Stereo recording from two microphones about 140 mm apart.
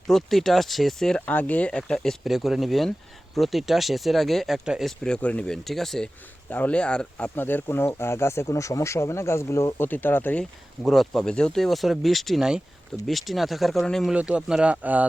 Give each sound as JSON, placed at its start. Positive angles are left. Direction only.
{"t": 0.1, "sound": "speech", "side_deg": 0}
{"t": 10.8, "sound": "speech", "side_deg": 0}